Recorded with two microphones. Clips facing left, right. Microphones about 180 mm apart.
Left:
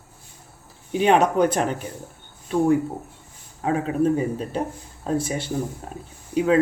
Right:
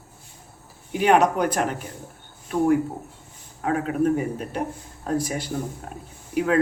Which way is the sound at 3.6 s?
25° left (ahead or behind).